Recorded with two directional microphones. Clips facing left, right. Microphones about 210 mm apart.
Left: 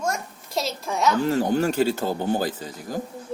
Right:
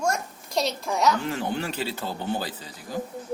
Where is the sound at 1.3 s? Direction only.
40° left (ahead or behind).